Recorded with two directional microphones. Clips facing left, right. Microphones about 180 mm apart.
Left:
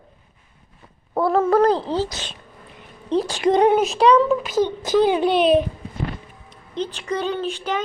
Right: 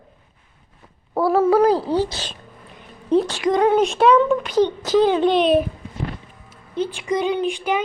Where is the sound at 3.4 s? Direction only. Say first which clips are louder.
Left 1 dB; 25° left (ahead or behind).